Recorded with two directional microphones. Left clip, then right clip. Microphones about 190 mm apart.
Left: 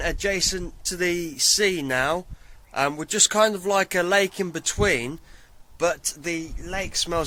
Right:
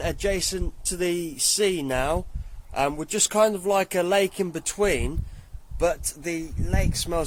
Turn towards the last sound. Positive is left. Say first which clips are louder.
# left 2 dB
turn(degrees=-5)  # may be behind; listen again after turning